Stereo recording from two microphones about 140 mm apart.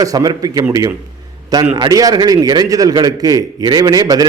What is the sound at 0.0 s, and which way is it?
A man's voice, 25° right (ahead or behind).